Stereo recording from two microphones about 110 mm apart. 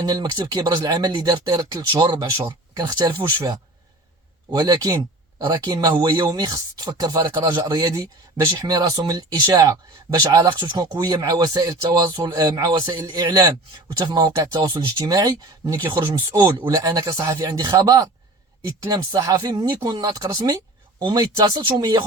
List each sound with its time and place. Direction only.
0.0 s speech: 40° right (ahead or behind)
2.4 s speech: 25° right (ahead or behind)
2.8 s speech: 40° right (ahead or behind)
4.5 s speech: 35° right (ahead or behind)